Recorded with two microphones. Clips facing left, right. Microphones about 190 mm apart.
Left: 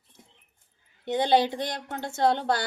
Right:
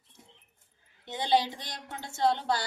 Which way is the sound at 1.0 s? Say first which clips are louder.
Left 5 dB; 60° left (ahead or behind).